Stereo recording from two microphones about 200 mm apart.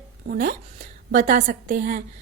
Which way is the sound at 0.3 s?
45° right (ahead or behind).